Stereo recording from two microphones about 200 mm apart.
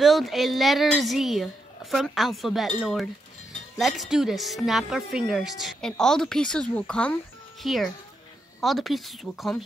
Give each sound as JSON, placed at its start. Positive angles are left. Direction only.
{"t": 0.0, "sound": "a woman's voice", "side_deg": 0}